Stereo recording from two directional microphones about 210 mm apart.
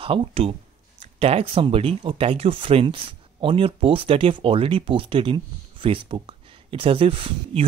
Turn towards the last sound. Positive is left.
turn(degrees=-25)  # may be behind; listen again after turning